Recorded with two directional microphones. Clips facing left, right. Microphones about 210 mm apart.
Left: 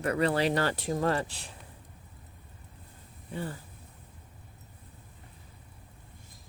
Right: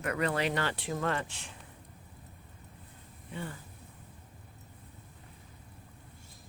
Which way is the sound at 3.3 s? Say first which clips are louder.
Left 4 dB; 35° left (ahead or behind).